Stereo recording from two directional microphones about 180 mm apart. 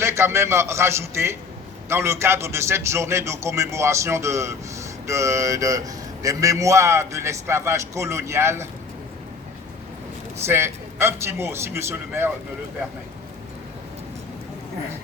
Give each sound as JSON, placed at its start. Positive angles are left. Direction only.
{"t": 0.0, "sound": "a man's voice", "side_deg": -15}
{"t": 10.4, "sound": "a man's voice", "side_deg": -15}